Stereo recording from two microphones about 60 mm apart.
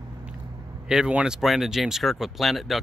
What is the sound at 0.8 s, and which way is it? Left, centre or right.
Speech, centre.